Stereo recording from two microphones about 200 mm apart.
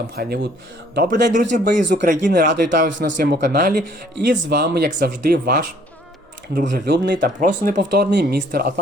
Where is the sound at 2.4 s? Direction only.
60° right (ahead or behind).